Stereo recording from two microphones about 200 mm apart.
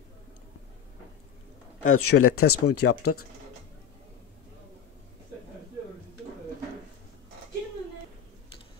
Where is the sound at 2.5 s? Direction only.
90° left.